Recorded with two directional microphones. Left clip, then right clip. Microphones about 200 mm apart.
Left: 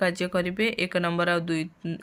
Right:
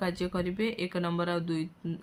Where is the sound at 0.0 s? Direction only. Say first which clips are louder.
Left 7 dB; 30° left (ahead or behind).